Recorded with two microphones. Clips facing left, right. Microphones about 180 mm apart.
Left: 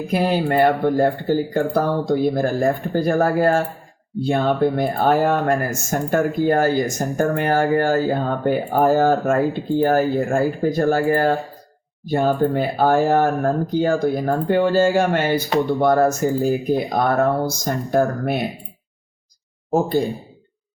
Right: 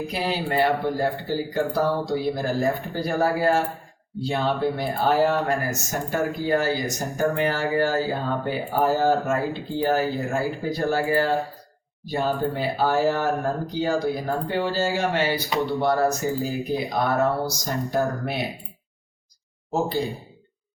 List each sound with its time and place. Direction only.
0.1 s speech: 50° left (ahead or behind)
19.7 s speech: 50° left (ahead or behind)